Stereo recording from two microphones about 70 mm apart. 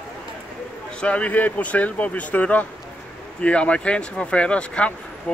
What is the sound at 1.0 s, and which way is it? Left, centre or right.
Speech, centre.